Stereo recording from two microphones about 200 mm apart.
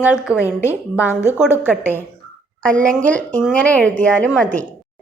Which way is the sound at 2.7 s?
40° right (ahead or behind).